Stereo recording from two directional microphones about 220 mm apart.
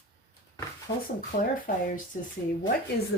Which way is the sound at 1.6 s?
40° left (ahead or behind).